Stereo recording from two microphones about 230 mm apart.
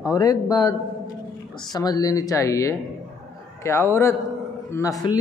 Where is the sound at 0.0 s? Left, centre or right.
Centre.